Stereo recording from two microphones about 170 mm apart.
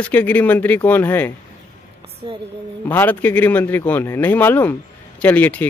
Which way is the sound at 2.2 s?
30° right (ahead or behind).